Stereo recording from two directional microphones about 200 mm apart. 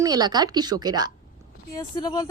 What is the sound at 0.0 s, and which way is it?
Speech, 20° right (ahead or behind).